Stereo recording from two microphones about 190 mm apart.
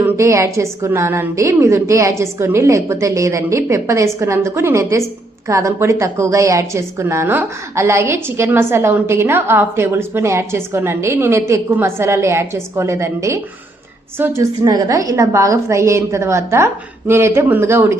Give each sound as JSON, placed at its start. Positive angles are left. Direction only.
{"t": 0.0, "sound": "a woman's voice", "side_deg": -15}